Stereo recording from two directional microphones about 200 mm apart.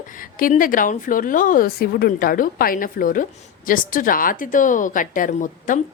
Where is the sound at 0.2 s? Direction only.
45° left (ahead or behind).